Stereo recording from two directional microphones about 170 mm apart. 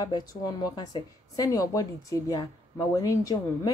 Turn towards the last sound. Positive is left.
turn(degrees=20)  # may be behind; listen again after turning